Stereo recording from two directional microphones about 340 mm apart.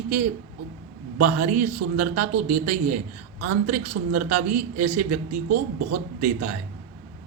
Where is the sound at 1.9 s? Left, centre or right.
Right.